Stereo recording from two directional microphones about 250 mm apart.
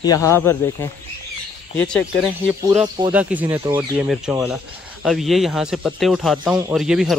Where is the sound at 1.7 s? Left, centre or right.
Centre.